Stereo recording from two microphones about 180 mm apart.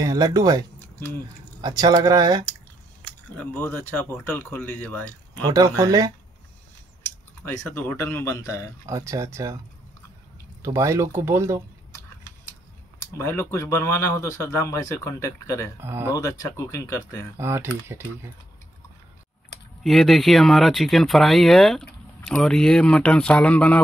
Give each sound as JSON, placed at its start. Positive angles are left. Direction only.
{"t": 0.0, "sound": "speech", "side_deg": -20}
{"t": 0.7, "sound": "a sound", "side_deg": 10}
{"t": 1.6, "sound": "speech", "side_deg": -20}
{"t": 3.3, "sound": "speech", "side_deg": 10}
{"t": 5.3, "sound": "speech", "side_deg": -20}
{"t": 7.4, "sound": "speech", "side_deg": 15}
{"t": 8.8, "sound": "speech", "side_deg": -15}
{"t": 10.6, "sound": "speech", "side_deg": -15}
{"t": 13.2, "sound": "speech", "side_deg": 15}
{"t": 15.8, "sound": "speech", "side_deg": -15}
{"t": 16.2, "sound": "speech", "side_deg": 15}
{"t": 17.4, "sound": "speech", "side_deg": -15}
{"t": 19.8, "sound": "speech", "side_deg": 0}